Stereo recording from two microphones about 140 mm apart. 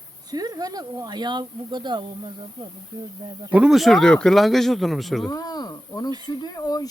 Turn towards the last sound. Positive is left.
turn(degrees=30)  # may be behind; listen again after turning